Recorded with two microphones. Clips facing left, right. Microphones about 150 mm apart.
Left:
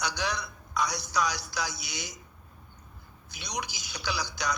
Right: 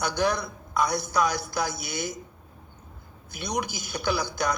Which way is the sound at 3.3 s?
55° right (ahead or behind).